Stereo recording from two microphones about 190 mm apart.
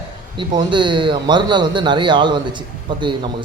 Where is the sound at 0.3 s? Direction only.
25° right (ahead or behind).